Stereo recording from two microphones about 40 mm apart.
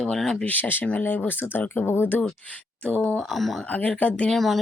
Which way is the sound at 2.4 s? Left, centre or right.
Left.